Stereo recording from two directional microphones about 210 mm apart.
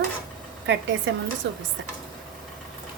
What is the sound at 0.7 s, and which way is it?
Speech, 60° right (ahead or behind).